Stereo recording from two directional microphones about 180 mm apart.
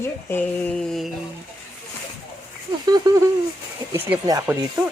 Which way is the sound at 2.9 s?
20° right (ahead or behind).